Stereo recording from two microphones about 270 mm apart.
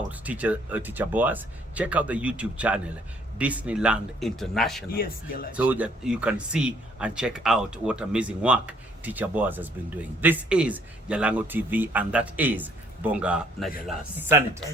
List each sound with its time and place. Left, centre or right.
0.1 s speech: centre
4.9 s speech: left
5.5 s speech: centre